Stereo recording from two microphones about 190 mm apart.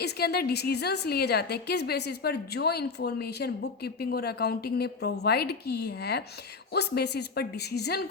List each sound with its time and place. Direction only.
0.0 s a woman's voice: 55° left (ahead or behind)